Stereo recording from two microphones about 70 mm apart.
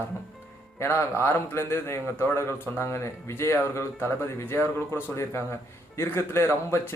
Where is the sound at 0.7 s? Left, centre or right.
Left.